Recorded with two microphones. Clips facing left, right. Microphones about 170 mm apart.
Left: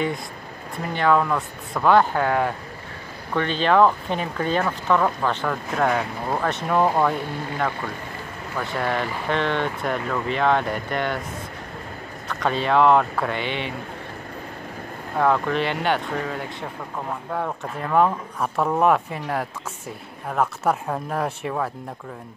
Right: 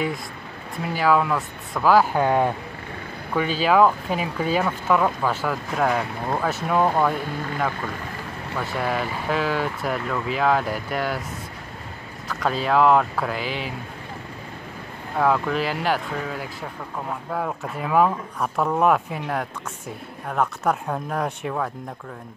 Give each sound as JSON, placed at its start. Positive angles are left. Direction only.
{"t": 0.8, "sound": "speech", "side_deg": -5}
{"t": 2.1, "sound": "speech", "side_deg": -20}
{"t": 3.3, "sound": "speech", "side_deg": -5}
{"t": 8.7, "sound": "speech", "side_deg": -5}
{"t": 12.3, "sound": "speech", "side_deg": 0}
{"t": 15.1, "sound": "speech", "side_deg": 0}